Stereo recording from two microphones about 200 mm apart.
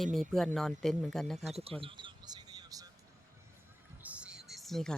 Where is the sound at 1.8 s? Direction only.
25° right (ahead or behind).